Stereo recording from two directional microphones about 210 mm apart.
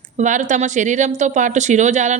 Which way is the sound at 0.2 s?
35° right (ahead or behind).